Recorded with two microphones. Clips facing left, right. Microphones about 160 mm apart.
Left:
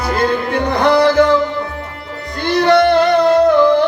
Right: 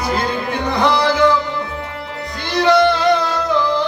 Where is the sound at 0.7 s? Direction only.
55° left (ahead or behind).